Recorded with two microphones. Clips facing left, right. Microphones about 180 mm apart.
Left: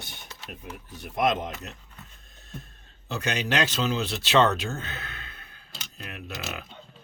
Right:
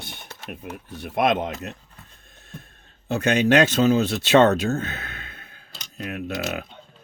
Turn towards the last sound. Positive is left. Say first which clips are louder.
# right 9 dB
turn(degrees=-50)  # may be behind; listen again after turning